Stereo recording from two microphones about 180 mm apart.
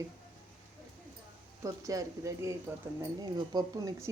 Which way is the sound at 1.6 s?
20° right (ahead or behind).